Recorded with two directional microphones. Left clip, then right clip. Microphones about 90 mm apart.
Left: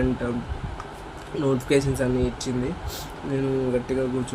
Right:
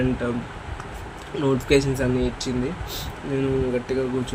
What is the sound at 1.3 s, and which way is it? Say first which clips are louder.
Speech: right 2 dB; centre (ahead or behind).